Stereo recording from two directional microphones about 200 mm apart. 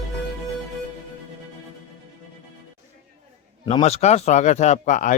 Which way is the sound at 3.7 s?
35° left (ahead or behind).